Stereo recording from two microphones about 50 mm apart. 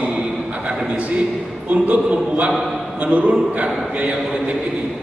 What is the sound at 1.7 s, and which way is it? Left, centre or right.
Speech, right.